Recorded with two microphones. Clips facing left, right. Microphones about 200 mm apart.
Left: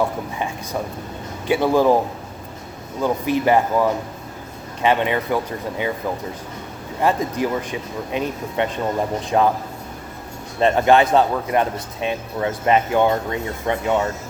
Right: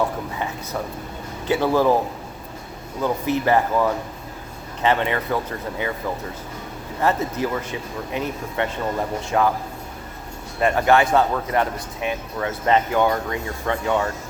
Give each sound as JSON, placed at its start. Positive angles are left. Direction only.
{"t": 0.3, "sound": "a man's voice", "side_deg": 20}
{"t": 3.0, "sound": "speech", "side_deg": 15}
{"t": 7.0, "sound": "a man's voice", "side_deg": 15}
{"t": 10.6, "sound": "a man's voice", "side_deg": 20}